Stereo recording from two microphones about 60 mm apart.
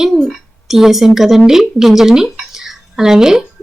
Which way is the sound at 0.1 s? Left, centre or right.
Centre.